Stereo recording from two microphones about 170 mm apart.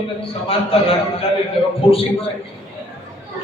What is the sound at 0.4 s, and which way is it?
Speech, 35° left (ahead or behind).